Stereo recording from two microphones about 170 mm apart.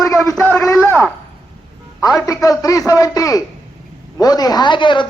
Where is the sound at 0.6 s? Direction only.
10° left (ahead or behind).